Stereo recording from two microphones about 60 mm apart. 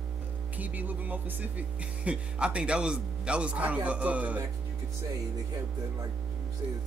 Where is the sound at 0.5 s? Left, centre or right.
Right.